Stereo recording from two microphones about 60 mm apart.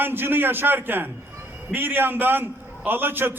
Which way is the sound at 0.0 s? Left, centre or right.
Right.